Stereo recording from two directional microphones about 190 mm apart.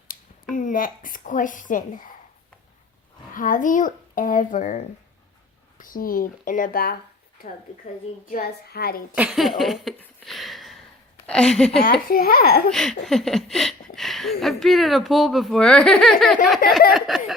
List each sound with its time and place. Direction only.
0.1 s speech: 45° left (ahead or behind)
3.3 s speech: 45° left (ahead or behind)
8.3 s speech: 55° left (ahead or behind)
9.1 s a sound: 5° right (ahead or behind)
11.3 s speech: 5° left (ahead or behind)
11.8 s speech: 50° left (ahead or behind)
12.7 s speech: centre (ahead or behind)